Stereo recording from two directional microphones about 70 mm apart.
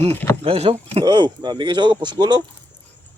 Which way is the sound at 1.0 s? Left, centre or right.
Right.